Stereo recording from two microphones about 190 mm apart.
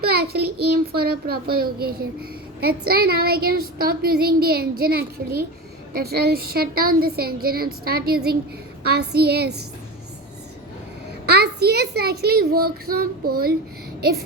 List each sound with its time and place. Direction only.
0.0 s a child's voice: 55° right (ahead or behind)
11.3 s a child's voice: 60° right (ahead or behind)